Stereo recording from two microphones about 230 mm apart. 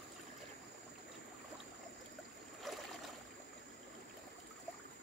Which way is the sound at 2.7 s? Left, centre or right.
Centre.